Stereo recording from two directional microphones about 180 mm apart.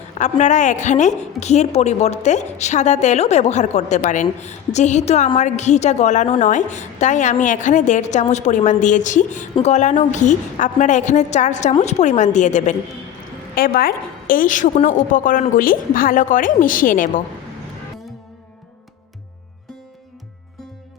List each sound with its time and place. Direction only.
0.1 s a woman's voice: 40° left (ahead or behind)
13.6 s a woman's voice: 55° left (ahead or behind)